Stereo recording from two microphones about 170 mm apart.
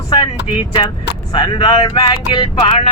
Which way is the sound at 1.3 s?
25° left (ahead or behind).